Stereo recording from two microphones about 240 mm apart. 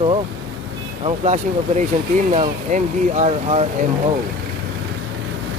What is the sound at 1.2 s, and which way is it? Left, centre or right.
Speech, right.